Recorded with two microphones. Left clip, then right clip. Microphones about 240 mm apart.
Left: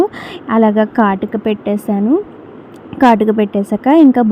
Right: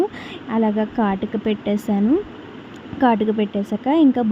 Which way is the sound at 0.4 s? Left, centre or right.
Centre.